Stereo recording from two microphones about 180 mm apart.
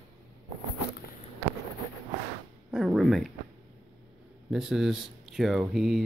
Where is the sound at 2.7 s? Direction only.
Centre (ahead or behind).